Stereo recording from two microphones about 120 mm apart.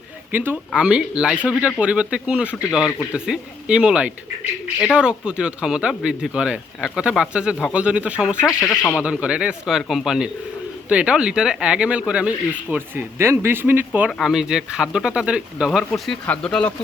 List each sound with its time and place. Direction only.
0.3 s speech: 15° right (ahead or behind)
14.1 s speech: centre (ahead or behind)
15.9 s speech: 10° left (ahead or behind)